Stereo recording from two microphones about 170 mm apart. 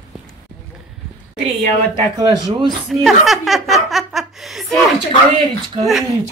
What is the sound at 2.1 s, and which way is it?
Speech, 25° right (ahead or behind).